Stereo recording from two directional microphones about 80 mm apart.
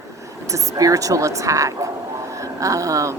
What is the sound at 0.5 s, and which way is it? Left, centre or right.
Speech, right.